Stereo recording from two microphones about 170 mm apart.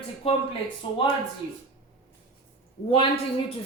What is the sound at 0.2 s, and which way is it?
Speech, 35° left (ahead or behind).